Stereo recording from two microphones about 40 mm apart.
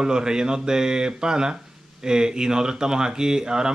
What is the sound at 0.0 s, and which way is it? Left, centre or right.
Speech, centre.